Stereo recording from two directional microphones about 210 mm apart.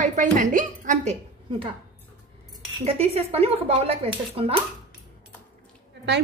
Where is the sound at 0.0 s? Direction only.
35° right (ahead or behind).